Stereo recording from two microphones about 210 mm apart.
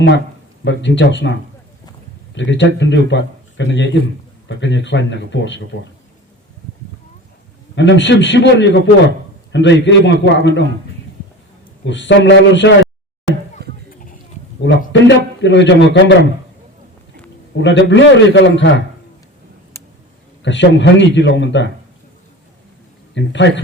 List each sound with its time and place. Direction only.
0.6 s a man's voice: 60° left (ahead or behind)
7.8 s a man's voice: 60° left (ahead or behind)
11.9 s a man's voice: 60° left (ahead or behind)
13.6 s a sound: 50° right (ahead or behind)
14.6 s a man's voice: 60° left (ahead or behind)
17.6 s a man's voice: 60° left (ahead or behind)
20.4 s a man's voice: 60° left (ahead or behind)
23.1 s a man's voice: 60° left (ahead or behind)